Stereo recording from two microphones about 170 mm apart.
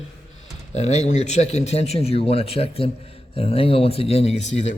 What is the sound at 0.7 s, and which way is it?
Speech, 40° left (ahead or behind).